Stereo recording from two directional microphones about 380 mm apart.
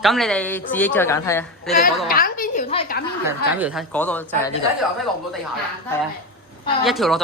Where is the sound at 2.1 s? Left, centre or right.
Left.